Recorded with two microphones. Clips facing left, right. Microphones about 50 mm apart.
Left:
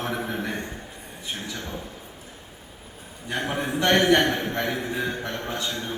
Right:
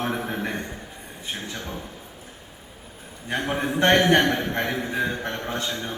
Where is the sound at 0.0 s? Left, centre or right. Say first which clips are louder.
Right 1 dB; right.